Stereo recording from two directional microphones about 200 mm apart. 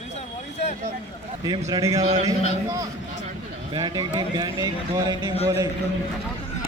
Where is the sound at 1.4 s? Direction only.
20° right (ahead or behind).